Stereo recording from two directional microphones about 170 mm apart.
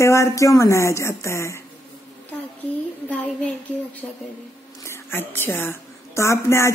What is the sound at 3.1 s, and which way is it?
A woman's voice, 10° left (ahead or behind).